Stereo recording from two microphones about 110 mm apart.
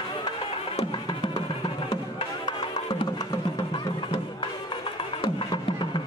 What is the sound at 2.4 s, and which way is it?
Music, 40° left (ahead or behind).